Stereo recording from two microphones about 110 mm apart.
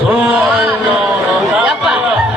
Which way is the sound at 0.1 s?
10° right (ahead or behind).